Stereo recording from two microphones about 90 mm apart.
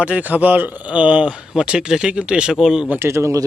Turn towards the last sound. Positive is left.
turn(degrees=-30)  # may be behind; listen again after turning